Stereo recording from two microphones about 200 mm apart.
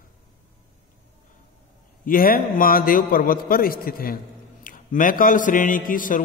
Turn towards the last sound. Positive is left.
turn(degrees=40)  # may be behind; listen again after turning